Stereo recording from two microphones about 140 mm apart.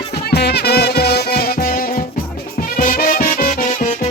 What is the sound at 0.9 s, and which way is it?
Music, 90° left.